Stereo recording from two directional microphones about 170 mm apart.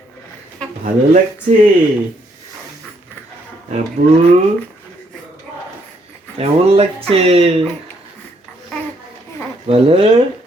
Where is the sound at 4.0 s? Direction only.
50° right (ahead or behind).